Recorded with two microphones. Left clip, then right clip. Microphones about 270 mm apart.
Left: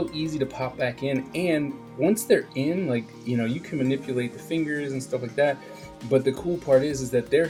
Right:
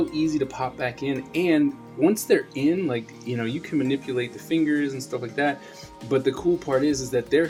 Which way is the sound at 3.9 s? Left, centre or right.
Right.